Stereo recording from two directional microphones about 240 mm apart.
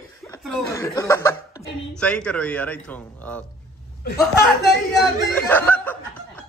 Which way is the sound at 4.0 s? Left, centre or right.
Left.